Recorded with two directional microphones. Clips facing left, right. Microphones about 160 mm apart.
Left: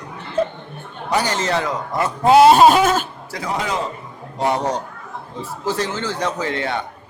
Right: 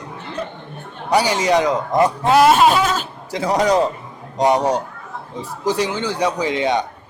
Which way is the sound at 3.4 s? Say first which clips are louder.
Right 7 dB; 40° right (ahead or behind).